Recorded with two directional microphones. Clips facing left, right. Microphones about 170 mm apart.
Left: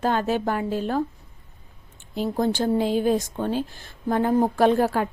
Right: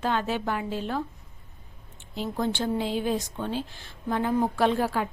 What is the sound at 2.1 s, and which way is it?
Speech, 45° left (ahead or behind).